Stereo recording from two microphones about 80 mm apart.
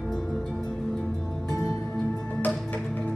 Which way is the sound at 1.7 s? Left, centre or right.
Centre.